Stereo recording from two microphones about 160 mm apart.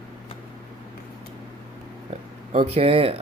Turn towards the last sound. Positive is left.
turn(degrees=-35)  # may be behind; listen again after turning